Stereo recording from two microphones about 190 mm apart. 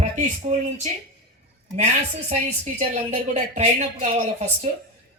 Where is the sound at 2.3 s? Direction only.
35° right (ahead or behind).